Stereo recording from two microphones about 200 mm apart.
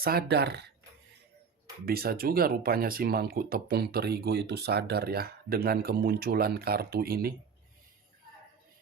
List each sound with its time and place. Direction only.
0.0 s speech: 50° right (ahead or behind)
1.8 s speech: 50° right (ahead or behind)